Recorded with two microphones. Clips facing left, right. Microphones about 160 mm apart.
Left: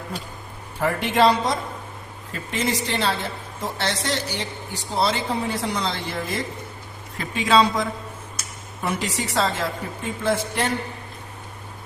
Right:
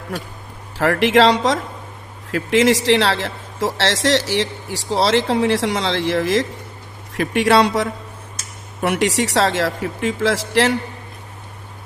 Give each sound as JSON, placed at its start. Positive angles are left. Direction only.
{"t": 0.8, "sound": "a man's voice", "side_deg": -90}
{"t": 7.1, "sound": "a man's voice", "side_deg": -75}